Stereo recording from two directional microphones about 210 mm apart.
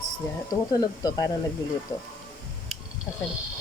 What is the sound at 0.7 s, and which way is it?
Speech, 20° left (ahead or behind).